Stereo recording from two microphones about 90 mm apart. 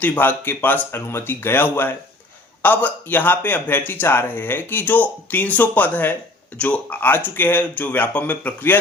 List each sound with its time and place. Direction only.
0.0 s speech: 20° left (ahead or behind)